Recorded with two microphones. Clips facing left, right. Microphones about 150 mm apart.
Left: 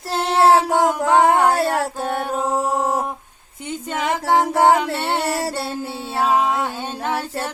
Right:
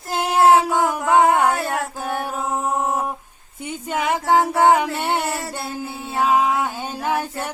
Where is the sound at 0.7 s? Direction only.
35° left (ahead or behind).